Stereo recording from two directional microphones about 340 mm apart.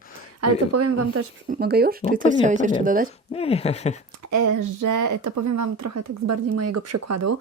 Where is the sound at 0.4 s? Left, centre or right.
Right.